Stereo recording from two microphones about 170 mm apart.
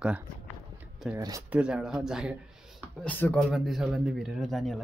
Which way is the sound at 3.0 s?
10° left (ahead or behind).